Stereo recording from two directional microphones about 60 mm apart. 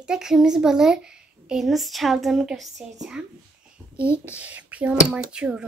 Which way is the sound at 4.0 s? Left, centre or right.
Right.